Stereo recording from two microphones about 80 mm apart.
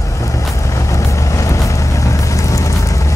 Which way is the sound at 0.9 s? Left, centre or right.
Left.